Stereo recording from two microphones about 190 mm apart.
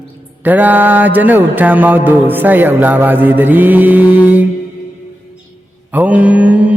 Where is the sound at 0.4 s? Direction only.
10° right (ahead or behind).